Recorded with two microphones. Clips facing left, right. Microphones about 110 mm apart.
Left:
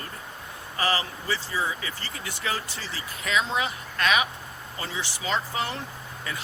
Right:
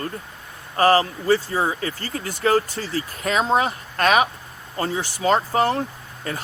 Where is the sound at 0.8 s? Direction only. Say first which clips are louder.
Right 11 dB; 45° right (ahead or behind).